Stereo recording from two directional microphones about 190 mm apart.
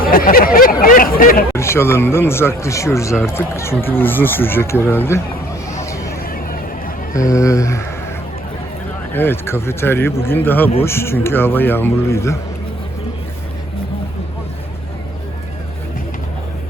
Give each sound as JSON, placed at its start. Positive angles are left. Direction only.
{"t": 0.0, "sound": "speech", "side_deg": 50}
{"t": 1.5, "sound": "speech", "side_deg": 15}
{"t": 5.8, "sound": "vehicle", "side_deg": 15}
{"t": 6.2, "sound": "a sound", "side_deg": 50}
{"t": 7.2, "sound": "speech", "side_deg": 15}
{"t": 9.1, "sound": "speech", "side_deg": 10}